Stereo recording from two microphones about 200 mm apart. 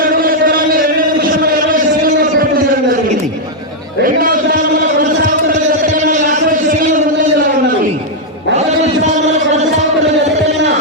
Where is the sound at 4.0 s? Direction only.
45° right (ahead or behind).